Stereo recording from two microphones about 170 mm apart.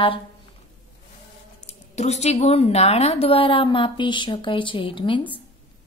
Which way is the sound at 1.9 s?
40° left (ahead or behind).